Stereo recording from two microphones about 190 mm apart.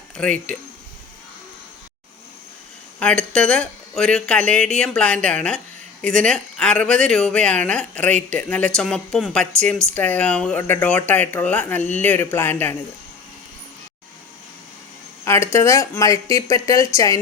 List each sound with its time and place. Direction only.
0.2 s speech: 5° left (ahead or behind)
3.0 s speech: 5° left (ahead or behind)
15.2 s speech: 15° left (ahead or behind)